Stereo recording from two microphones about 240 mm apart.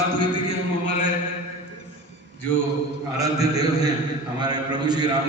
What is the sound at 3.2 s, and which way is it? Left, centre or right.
A man's voice, centre.